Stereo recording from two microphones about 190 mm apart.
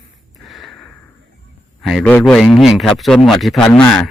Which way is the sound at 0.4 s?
Centre (ahead or behind).